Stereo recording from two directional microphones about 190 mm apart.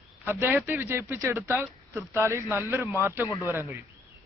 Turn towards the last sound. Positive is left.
turn(degrees=-10)  # may be behind; listen again after turning